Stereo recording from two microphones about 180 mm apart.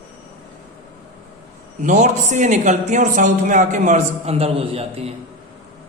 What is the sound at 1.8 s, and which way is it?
A man's voice, 40° right (ahead or behind).